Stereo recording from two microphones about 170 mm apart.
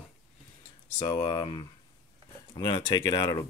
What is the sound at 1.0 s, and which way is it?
Speech, 25° left (ahead or behind).